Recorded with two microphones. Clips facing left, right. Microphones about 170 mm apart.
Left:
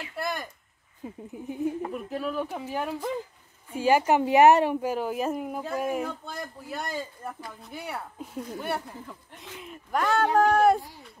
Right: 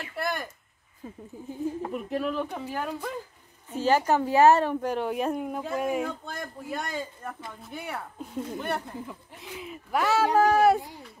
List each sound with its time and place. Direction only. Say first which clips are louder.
0.2 s a sound: right 1 dB; centre (ahead or behind)
1.0 s speech: left 3 dB; 15° left (ahead or behind)
1.8 s a woman's voice: right 2 dB; centre (ahead or behind)